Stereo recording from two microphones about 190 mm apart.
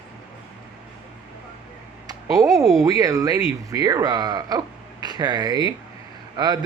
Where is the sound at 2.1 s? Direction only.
20° right (ahead or behind).